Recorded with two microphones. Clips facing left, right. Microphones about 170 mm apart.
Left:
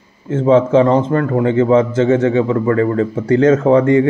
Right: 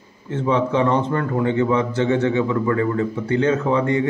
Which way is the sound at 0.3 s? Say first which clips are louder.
Left 8 dB; 45° left (ahead or behind).